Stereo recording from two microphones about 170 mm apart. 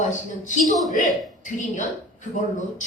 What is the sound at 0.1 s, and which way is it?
A man's voice, 45° left (ahead or behind).